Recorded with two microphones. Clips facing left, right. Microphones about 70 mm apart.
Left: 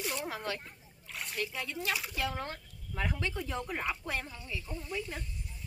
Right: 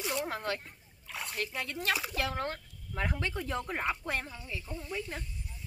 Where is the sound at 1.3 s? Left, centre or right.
Right.